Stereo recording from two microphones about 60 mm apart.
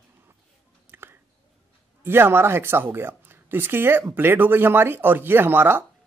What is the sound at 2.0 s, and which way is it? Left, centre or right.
Speech, right.